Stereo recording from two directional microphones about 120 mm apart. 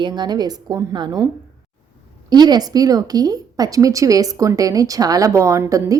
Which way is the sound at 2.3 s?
35° right (ahead or behind).